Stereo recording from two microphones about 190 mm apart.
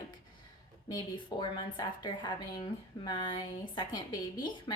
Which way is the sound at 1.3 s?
25° left (ahead or behind).